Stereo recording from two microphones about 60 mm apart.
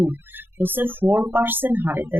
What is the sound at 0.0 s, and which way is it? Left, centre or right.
A woman's voice, right.